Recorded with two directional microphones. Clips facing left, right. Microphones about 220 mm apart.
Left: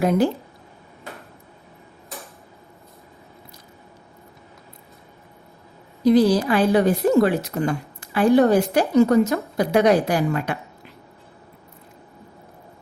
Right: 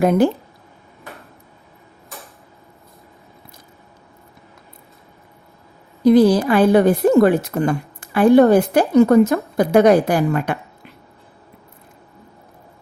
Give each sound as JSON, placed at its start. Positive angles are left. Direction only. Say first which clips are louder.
{"t": 0.0, "sound": "speech", "louder": "right 4 dB", "side_deg": -55}
{"t": 6.1, "sound": "a woman's voice", "louder": "right 4 dB", "side_deg": -55}